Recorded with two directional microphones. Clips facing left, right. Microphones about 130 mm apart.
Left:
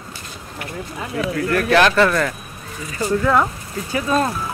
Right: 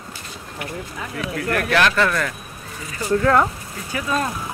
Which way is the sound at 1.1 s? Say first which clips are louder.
Left 4 dB; 35° left (ahead or behind).